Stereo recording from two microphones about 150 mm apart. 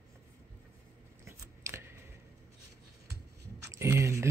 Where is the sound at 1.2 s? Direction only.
20° right (ahead or behind).